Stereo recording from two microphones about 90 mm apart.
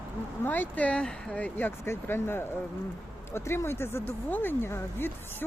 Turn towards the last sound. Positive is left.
turn(degrees=25)  # may be behind; listen again after turning